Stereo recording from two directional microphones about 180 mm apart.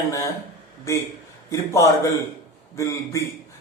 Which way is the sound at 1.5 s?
15° left (ahead or behind).